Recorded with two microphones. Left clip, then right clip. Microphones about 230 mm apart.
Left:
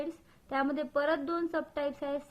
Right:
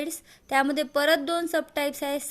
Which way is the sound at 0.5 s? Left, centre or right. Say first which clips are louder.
Right 7 dB; right.